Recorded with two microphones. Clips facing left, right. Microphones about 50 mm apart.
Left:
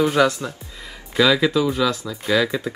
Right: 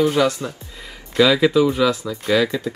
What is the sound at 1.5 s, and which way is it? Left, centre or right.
Speech, centre.